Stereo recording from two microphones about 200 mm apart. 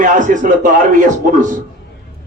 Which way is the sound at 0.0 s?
40° right (ahead or behind).